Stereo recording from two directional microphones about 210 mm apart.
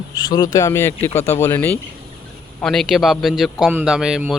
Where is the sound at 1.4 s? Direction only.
10° left (ahead or behind).